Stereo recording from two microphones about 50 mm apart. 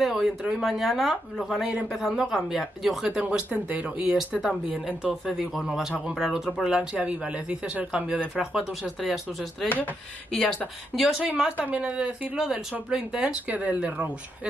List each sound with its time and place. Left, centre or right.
0.0 s speech: centre
3.1 s speech: right
5.4 s speech: centre
9.1 s speech: centre
11.5 s speech: right
12.4 s speech: centre
13.5 s speech: right